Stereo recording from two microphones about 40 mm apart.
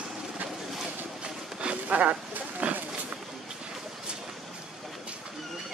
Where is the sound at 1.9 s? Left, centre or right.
Right.